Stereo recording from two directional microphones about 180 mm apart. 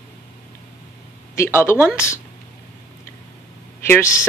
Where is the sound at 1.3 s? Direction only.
15° left (ahead or behind).